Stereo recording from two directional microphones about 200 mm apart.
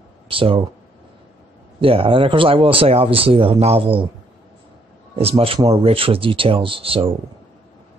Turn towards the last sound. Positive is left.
turn(degrees=-30)  # may be behind; listen again after turning